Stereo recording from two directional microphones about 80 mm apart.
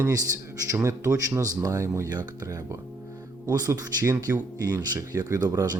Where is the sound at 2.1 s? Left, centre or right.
Right.